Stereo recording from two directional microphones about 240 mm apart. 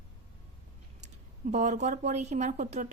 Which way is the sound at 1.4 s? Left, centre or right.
Right.